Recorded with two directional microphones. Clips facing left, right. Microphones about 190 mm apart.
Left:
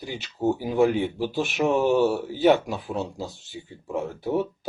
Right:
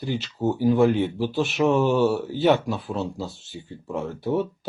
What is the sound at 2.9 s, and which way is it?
Speech, 15° left (ahead or behind).